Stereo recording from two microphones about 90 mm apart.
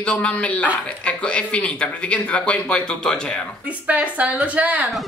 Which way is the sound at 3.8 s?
15° right (ahead or behind).